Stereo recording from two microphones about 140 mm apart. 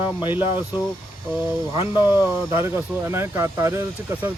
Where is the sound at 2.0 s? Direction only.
15° right (ahead or behind).